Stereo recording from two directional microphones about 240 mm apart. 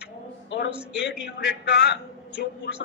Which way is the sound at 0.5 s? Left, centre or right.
Left.